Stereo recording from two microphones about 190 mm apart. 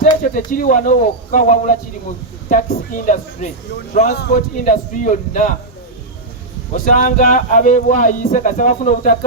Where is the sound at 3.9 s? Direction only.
35° left (ahead or behind).